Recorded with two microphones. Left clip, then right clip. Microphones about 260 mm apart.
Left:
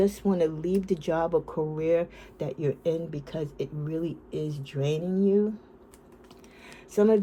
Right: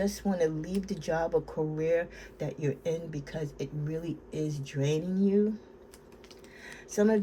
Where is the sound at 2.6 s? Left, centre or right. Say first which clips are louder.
Left 5 dB; centre.